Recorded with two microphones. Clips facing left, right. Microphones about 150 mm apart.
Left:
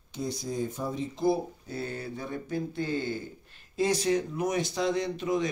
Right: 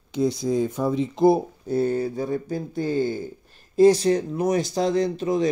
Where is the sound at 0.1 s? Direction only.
90° right; by 1.4 s 70° right (ahead or behind).